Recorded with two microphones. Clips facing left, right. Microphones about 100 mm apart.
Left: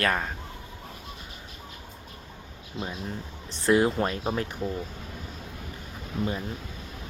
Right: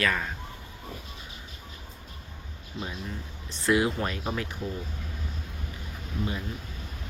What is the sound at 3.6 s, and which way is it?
Speech, 35° left (ahead or behind).